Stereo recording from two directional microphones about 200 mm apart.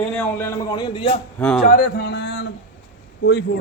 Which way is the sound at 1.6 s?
55° left (ahead or behind).